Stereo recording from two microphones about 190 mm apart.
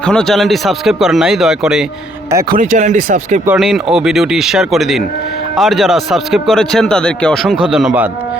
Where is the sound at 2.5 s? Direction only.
45° right (ahead or behind).